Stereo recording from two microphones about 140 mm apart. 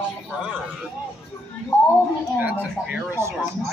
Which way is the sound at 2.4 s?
10° right (ahead or behind).